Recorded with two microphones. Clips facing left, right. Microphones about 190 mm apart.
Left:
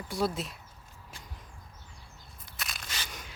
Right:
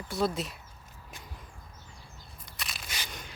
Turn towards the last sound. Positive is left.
turn(degrees=5)  # may be behind; listen again after turning